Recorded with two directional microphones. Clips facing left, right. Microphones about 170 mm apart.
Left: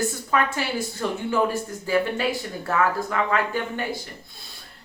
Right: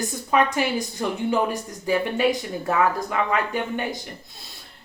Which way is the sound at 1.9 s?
15° right (ahead or behind).